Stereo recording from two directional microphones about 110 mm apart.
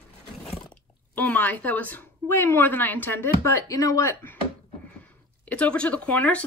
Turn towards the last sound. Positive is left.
turn(degrees=15)  # may be behind; listen again after turning